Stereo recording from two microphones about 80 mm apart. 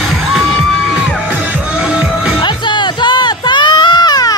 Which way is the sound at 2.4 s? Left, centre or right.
Left.